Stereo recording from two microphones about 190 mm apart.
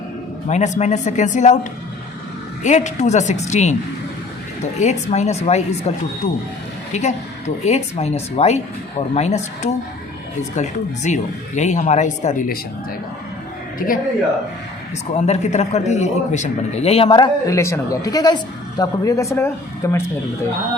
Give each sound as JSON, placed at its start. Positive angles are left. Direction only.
{"t": 0.4, "sound": "a man's voice", "side_deg": 40}
{"t": 2.6, "sound": "a man's voice", "side_deg": 40}
{"t": 4.8, "sound": "a man's voice", "side_deg": 35}
{"t": 6.9, "sound": "a man's voice", "side_deg": 35}
{"t": 13.7, "sound": "a man's voice", "side_deg": 50}
{"t": 15.1, "sound": "a man's voice", "side_deg": 35}